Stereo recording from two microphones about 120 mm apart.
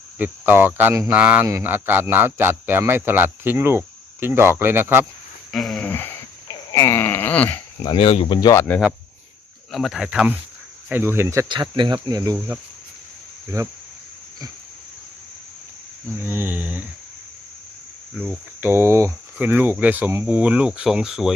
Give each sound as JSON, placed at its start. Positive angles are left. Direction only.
{"t": 0.2, "sound": "speech", "side_deg": -15}
{"t": 5.5, "sound": "a sound", "side_deg": 0}
{"t": 5.8, "sound": "a sound", "side_deg": 15}
{"t": 6.5, "sound": "a sound", "side_deg": 30}
{"t": 7.9, "sound": "speech", "side_deg": 50}
{"t": 8.4, "sound": "speech", "side_deg": 35}
{"t": 9.7, "sound": "speech", "side_deg": 0}
{"t": 10.8, "sound": "cricket", "side_deg": -20}
{"t": 11.4, "sound": "speech", "side_deg": -40}
{"t": 13.5, "sound": "cricket", "side_deg": -25}
{"t": 16.1, "sound": "speech", "side_deg": -20}
{"t": 18.1, "sound": "speech", "side_deg": 0}
{"t": 18.6, "sound": "cricket", "side_deg": -20}
{"t": 19.4, "sound": "speech", "side_deg": -15}